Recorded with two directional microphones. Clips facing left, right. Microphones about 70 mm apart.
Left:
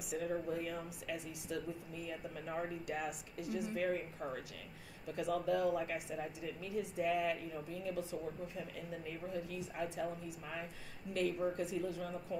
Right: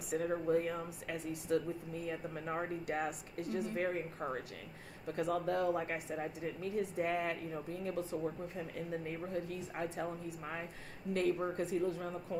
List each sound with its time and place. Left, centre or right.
0.1 s speech: right